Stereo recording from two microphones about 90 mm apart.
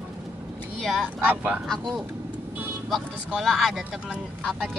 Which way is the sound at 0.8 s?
5° left (ahead or behind).